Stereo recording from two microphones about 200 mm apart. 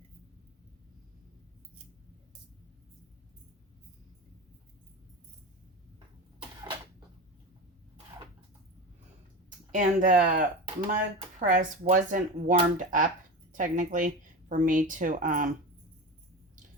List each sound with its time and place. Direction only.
9.7 s speech: 40° right (ahead or behind)